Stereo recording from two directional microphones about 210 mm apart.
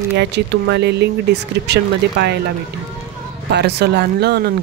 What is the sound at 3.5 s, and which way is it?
Speech, 50° right (ahead or behind).